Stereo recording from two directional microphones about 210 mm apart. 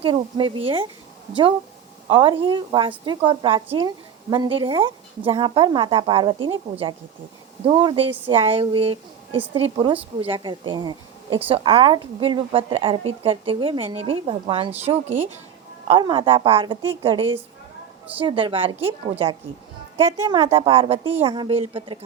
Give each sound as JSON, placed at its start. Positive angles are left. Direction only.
{"t": 0.0, "sound": "speech", "side_deg": -25}
{"t": 2.0, "sound": "a woman's voice", "side_deg": -25}